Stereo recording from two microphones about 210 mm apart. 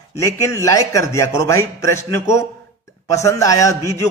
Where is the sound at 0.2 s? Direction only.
15° left (ahead or behind).